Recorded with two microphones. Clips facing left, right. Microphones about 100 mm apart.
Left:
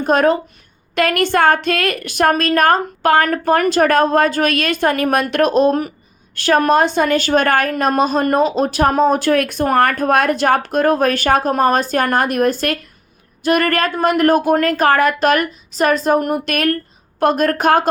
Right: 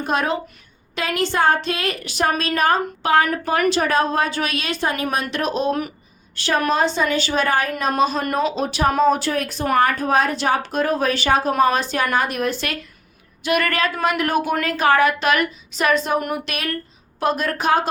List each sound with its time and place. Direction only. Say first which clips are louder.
0.0 s a woman's voice: left 8 dB; 45° left (ahead or behind)
0.9 s a woman's voice: left 6 dB; 60° left (ahead or behind)